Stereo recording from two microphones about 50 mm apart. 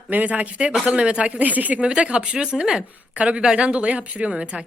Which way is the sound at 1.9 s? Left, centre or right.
Centre.